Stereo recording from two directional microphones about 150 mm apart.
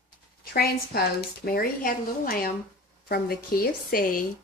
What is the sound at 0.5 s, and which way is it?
Speech, 90° left.